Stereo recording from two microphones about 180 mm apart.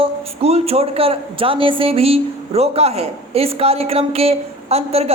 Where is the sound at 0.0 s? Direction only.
35° right (ahead or behind).